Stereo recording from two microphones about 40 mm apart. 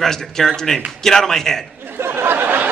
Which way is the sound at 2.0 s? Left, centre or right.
Right.